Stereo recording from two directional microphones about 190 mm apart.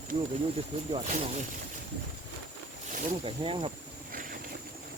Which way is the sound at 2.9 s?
45° right (ahead or behind).